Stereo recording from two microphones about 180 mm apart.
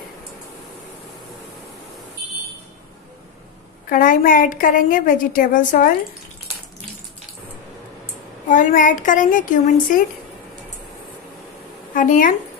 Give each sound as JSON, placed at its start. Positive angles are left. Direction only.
{"t": 3.9, "sound": "a woman's voice", "side_deg": 50}
{"t": 8.5, "sound": "a woman's voice", "side_deg": 45}
{"t": 11.9, "sound": "a woman's voice", "side_deg": 45}